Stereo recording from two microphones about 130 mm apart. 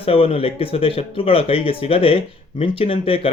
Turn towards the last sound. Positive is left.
turn(degrees=45)  # may be behind; listen again after turning